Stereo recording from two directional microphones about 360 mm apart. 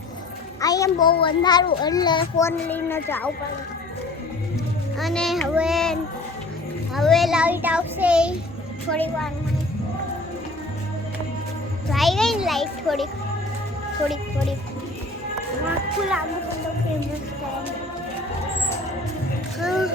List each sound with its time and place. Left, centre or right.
0.6 s a child's voice: centre
4.9 s a child's voice: centre
11.9 s a child's voice: centre
19.5 s a child's voice: centre